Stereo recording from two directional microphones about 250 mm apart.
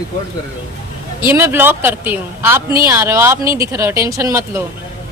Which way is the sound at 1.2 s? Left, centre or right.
Centre.